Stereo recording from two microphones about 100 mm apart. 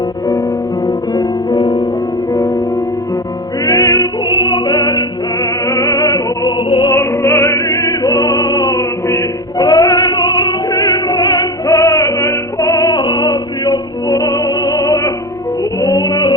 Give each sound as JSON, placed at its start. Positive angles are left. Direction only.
{"t": 0.9, "sound": "music", "side_deg": 45}
{"t": 3.7, "sound": "music", "side_deg": 30}
{"t": 4.3, "sound": "opera", "side_deg": 50}
{"t": 5.6, "sound": "music", "side_deg": 30}
{"t": 6.7, "sound": "music", "side_deg": 55}
{"t": 6.9, "sound": "music", "side_deg": 25}
{"t": 9.6, "sound": "female singing", "side_deg": 40}
{"t": 10.7, "sound": "music", "side_deg": 35}
{"t": 12.9, "sound": "music", "side_deg": 50}